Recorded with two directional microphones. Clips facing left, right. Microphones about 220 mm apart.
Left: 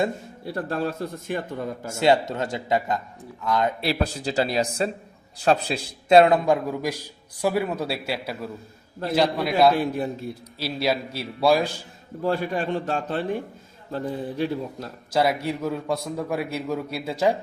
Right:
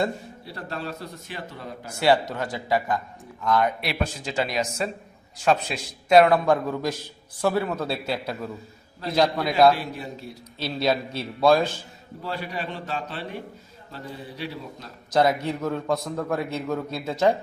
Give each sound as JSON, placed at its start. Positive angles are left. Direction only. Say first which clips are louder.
{"t": 0.4, "sound": "a man's voice", "louder": "left 7 dB", "side_deg": 50}
{"t": 1.9, "sound": "a man's voice", "louder": "left 1 dB", "side_deg": 20}
{"t": 9.7, "sound": "a man's voice", "louder": "left 8 dB", "side_deg": 50}
{"t": 10.6, "sound": "a man's voice", "louder": "right 1 dB", "side_deg": 5}
{"t": 12.2, "sound": "a man's voice", "louder": "left 7 dB", "side_deg": 50}
{"t": 15.1, "sound": "a man's voice", "louder": "right 1 dB", "side_deg": 5}